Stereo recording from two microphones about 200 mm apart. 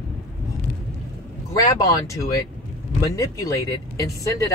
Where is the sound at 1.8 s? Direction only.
15° left (ahead or behind).